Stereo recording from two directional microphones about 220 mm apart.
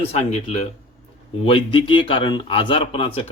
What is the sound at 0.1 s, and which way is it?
Speech, 30° left (ahead or behind).